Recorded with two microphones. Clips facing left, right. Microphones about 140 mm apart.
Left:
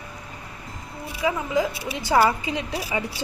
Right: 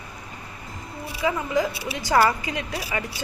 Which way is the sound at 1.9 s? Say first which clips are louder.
Even; 20° left (ahead or behind).